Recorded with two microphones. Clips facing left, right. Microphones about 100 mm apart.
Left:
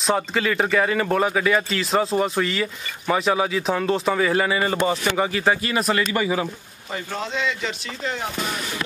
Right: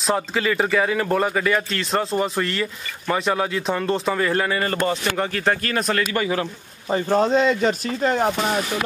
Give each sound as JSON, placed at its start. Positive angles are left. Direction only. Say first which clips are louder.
{"t": 0.0, "sound": "speech", "louder": "even", "side_deg": 0}
{"t": 6.9, "sound": "speech", "louder": "right 10 dB", "side_deg": -40}